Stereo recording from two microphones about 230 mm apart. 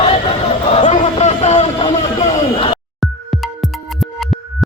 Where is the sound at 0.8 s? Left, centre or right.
Left.